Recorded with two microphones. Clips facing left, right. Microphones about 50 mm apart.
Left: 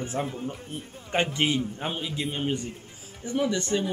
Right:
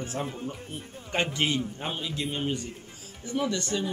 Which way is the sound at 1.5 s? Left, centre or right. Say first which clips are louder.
Left 2 dB; centre.